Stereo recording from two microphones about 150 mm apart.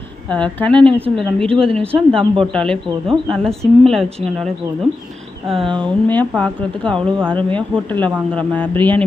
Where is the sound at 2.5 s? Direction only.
5° left (ahead or behind).